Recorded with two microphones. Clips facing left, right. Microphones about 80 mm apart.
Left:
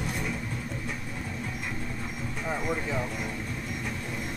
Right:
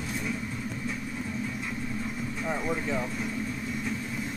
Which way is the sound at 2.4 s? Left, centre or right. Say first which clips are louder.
Even; centre.